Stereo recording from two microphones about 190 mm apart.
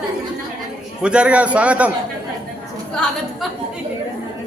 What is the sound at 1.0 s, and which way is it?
Speech, 5° right (ahead or behind).